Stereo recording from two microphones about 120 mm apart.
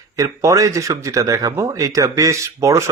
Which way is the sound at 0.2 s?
25° right (ahead or behind).